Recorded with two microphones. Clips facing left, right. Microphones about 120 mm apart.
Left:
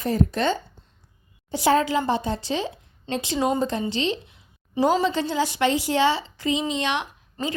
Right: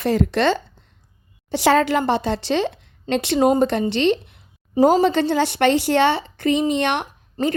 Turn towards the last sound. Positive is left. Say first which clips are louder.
# right 7 dB
turn(degrees=-55)  # may be behind; listen again after turning